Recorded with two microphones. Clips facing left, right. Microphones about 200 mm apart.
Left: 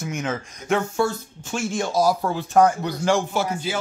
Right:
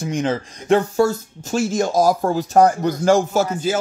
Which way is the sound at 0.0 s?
30° right (ahead or behind).